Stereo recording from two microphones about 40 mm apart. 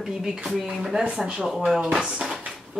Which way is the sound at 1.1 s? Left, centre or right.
Right.